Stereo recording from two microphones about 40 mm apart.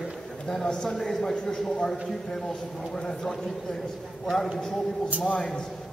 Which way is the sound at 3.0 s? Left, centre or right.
Centre.